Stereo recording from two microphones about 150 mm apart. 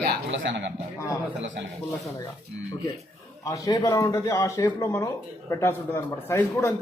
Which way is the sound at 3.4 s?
25° left (ahead or behind).